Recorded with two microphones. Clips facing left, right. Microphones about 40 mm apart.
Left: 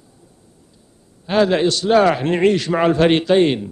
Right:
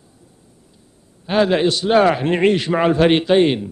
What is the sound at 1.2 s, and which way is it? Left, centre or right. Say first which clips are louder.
A man's voice: even; centre.